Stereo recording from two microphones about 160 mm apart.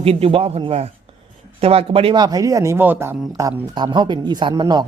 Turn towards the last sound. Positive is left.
turn(degrees=-25)  # may be behind; listen again after turning